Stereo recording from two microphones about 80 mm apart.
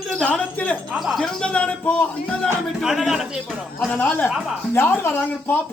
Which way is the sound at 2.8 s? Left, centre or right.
Centre.